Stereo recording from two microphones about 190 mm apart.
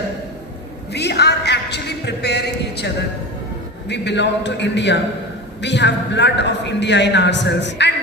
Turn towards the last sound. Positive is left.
turn(degrees=65)  # may be behind; listen again after turning